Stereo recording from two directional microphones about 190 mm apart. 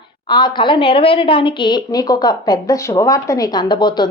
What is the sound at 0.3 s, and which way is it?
A woman's voice, 25° left (ahead or behind).